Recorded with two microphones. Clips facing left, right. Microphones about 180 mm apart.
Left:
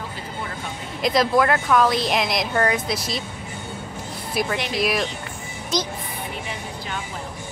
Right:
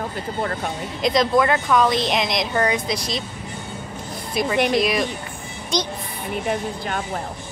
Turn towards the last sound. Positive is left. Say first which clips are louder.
# right 5 dB
turn(degrees=-50)  # may be behind; listen again after turning